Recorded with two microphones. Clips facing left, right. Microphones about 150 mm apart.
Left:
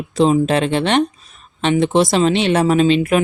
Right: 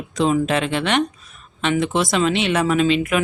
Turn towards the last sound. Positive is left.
turn(degrees=35)  # may be behind; listen again after turning